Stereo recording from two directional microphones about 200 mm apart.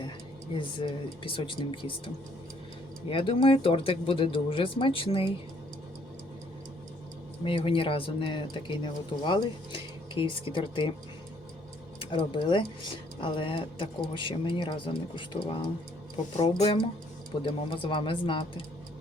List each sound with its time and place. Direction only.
0.5 s speech: 25° left (ahead or behind)
3.1 s speech: 25° left (ahead or behind)
7.4 s speech: 25° left (ahead or behind)
11.9 s speech: 25° left (ahead or behind)